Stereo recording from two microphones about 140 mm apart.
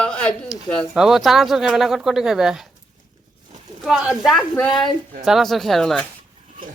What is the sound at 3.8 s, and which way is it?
Speech, 5° right (ahead or behind).